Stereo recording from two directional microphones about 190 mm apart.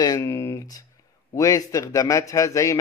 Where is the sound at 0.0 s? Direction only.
15° left (ahead or behind).